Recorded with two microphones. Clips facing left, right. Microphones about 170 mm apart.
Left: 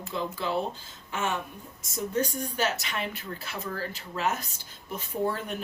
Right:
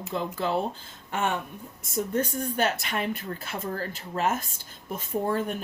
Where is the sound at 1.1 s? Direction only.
55° right (ahead or behind).